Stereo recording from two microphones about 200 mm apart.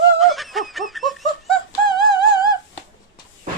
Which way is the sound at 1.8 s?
20° left (ahead or behind).